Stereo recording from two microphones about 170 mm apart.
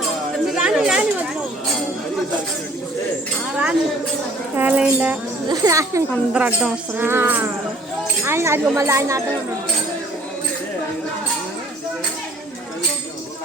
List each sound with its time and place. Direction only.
0.3 s chatter: centre (ahead or behind)
3.5 s speech: 5° right (ahead or behind)
5.5 s speech: 20° right (ahead or behind)
6.3 s speech: 5° right (ahead or behind)